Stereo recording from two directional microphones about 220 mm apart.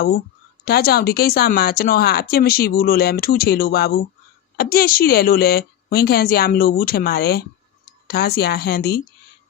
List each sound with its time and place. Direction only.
0.6 s speech: 45° left (ahead or behind)